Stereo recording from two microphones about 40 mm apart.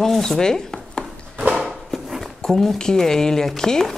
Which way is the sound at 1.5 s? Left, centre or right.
Centre.